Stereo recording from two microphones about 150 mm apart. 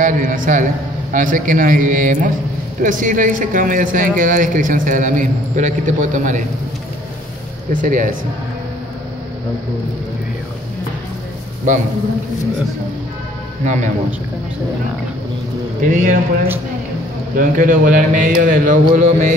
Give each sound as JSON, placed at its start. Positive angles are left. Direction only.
{"t": 0.0, "sound": "a man's voice", "side_deg": -60}
{"t": 7.7, "sound": "a man's voice", "side_deg": -60}
{"t": 15.8, "sound": "a man's voice", "side_deg": -65}
{"t": 17.4, "sound": "a man's voice", "side_deg": -60}